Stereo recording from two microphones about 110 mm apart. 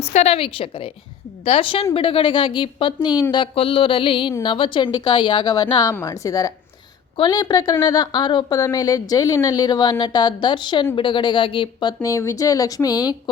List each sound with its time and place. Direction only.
0.0 s a woman's voice: 80° left; by 3.2 s 40° left (ahead or behind)
3.3 s a woman's voice: 55° left (ahead or behind)
12.0 s a woman's voice: 30° left (ahead or behind)